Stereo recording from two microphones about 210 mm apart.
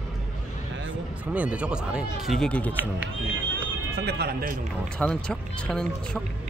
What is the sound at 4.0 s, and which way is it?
Speech, 50° right (ahead or behind).